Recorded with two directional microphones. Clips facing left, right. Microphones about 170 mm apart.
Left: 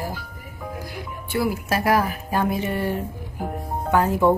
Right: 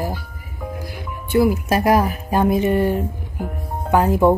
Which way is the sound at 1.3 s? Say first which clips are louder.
Right 7 dB; 20° right (ahead or behind).